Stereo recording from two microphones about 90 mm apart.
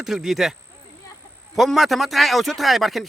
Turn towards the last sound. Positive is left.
turn(degrees=0)  # may be behind; listen again after turning